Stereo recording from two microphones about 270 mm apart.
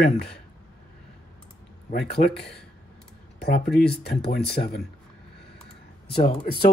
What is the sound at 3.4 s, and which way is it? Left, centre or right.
Speech, left.